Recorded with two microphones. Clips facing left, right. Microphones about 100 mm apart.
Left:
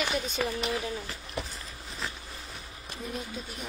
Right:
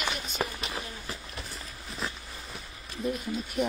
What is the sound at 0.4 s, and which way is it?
Speech, 30° right (ahead or behind).